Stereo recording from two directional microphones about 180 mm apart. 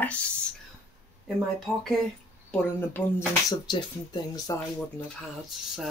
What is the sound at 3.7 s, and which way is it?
Speech, 20° left (ahead or behind).